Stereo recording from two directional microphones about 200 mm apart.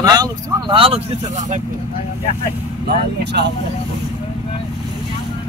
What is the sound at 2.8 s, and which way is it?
Speech, 60° right (ahead or behind).